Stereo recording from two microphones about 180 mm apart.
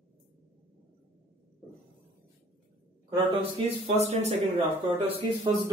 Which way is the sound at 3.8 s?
35° right (ahead or behind).